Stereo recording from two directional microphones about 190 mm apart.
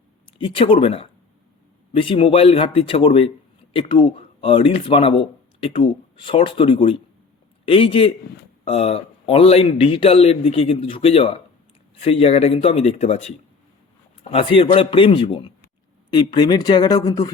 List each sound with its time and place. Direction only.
0.3 s a man's voice: 30° left (ahead or behind)